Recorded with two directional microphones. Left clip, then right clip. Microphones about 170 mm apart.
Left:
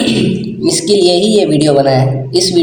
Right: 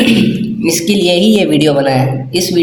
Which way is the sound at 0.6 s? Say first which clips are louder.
Left 3 dB; 80° right.